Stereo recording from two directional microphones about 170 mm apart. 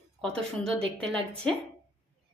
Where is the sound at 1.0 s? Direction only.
5° left (ahead or behind).